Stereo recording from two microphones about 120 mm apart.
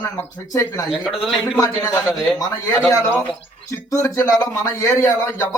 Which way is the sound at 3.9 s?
25° left (ahead or behind).